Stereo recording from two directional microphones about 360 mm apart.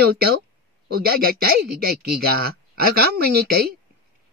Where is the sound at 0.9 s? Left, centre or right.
Right.